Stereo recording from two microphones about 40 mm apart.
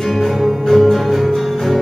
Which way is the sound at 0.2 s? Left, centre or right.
Centre.